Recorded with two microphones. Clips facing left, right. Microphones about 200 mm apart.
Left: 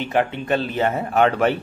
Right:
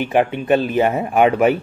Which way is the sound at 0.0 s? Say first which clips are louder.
Right 4 dB; 15° right (ahead or behind).